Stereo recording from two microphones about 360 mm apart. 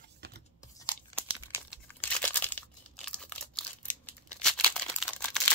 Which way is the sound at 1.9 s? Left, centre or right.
Centre.